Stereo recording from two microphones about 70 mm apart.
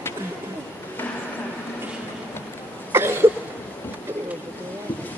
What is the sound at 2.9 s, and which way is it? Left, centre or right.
Cough, right.